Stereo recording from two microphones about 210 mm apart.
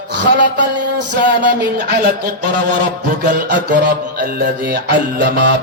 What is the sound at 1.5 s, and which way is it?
Music, 50° right (ahead or behind).